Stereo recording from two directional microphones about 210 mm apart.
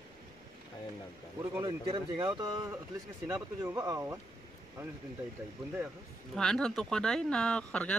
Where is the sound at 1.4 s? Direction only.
15° right (ahead or behind).